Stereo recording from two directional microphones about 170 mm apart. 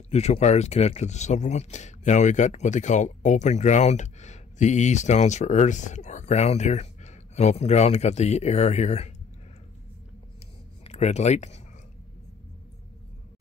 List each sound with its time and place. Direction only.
0.1 s speech: 40° left (ahead or behind)
10.8 s speech: 40° left (ahead or behind)